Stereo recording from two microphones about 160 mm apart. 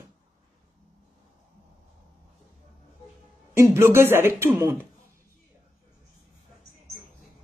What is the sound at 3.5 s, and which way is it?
A man's voice, 15° right (ahead or behind).